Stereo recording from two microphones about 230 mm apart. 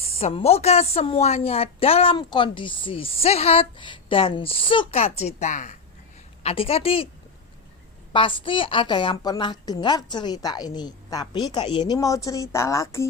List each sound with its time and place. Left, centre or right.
0.0 s a woman's voice: left
8.1 s a woman's voice: left